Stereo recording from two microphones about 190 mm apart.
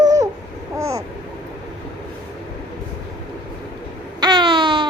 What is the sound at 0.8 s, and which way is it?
Babbling, 15° right (ahead or behind).